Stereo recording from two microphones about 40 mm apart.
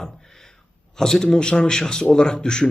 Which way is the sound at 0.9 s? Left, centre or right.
Centre.